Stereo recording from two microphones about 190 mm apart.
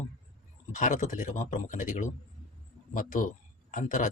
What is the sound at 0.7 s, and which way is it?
Speech, 40° left (ahead or behind).